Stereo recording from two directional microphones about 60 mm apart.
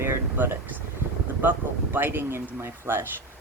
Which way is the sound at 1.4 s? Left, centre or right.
Right.